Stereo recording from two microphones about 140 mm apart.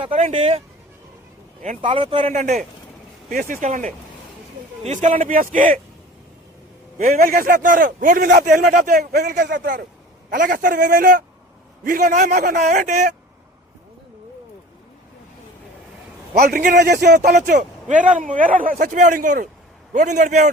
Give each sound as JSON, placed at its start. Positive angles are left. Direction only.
{"t": 0.1, "sound": "speech", "side_deg": -55}
{"t": 1.6, "sound": "a man's voice", "side_deg": -60}
{"t": 1.9, "sound": "a man's voice", "side_deg": -40}
{"t": 2.3, "sound": "a man's voice", "side_deg": -60}
{"t": 3.2, "sound": "a man's voice", "side_deg": -70}
{"t": 7.0, "sound": "a man's voice", "side_deg": -70}
{"t": 16.4, "sound": "a man's voice", "side_deg": -90}